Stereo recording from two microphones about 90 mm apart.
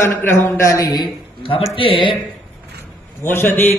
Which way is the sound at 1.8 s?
75° left (ahead or behind).